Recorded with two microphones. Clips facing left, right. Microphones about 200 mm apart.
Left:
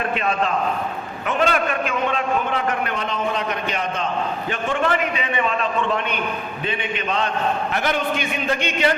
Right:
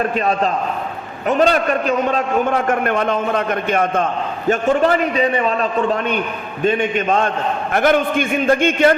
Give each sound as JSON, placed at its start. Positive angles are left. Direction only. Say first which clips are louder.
{"t": 0.2, "sound": "a man's voice", "louder": "right 4 dB", "side_deg": -40}